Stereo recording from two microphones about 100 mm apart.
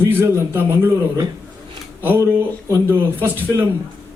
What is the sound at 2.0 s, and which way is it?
Speech, 20° right (ahead or behind).